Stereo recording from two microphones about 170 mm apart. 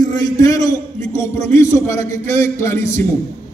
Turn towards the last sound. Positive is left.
turn(degrees=15)  # may be behind; listen again after turning